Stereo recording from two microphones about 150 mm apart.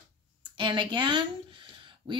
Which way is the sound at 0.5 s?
35° right (ahead or behind).